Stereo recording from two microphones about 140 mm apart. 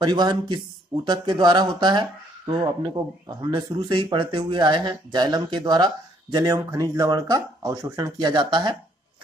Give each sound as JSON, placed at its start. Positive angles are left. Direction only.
{"t": 0.0, "sound": "speech", "side_deg": -30}